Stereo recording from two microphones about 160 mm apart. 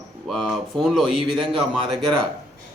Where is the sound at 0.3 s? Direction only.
Centre (ahead or behind).